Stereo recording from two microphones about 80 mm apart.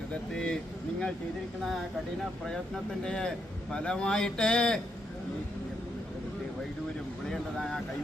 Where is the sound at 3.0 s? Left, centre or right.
Centre.